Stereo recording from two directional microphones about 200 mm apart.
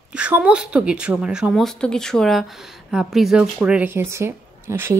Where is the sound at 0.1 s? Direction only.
5° right (ahead or behind).